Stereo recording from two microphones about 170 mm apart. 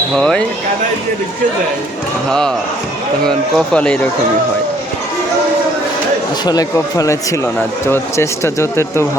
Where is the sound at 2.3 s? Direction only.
5° left (ahead or behind).